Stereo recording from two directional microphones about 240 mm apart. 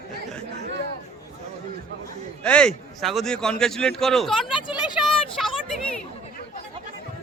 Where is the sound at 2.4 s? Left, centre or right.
Centre.